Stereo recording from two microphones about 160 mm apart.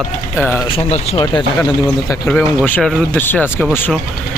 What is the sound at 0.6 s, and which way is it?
Speech, 40° left (ahead or behind).